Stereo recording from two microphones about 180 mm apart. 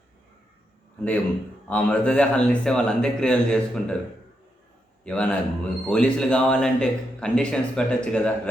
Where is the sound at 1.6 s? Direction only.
10° left (ahead or behind).